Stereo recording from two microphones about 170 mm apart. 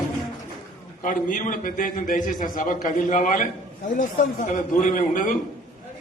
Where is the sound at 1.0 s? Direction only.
55° left (ahead or behind).